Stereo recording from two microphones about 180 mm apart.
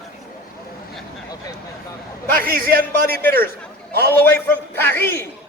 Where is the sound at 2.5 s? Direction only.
55° right (ahead or behind).